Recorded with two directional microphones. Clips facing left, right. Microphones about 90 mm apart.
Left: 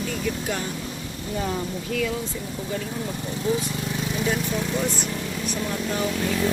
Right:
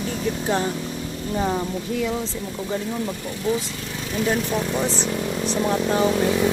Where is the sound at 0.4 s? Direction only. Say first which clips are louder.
Right 6 dB; 30° right (ahead or behind).